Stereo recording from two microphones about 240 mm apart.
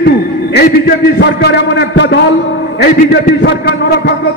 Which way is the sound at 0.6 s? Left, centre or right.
Left.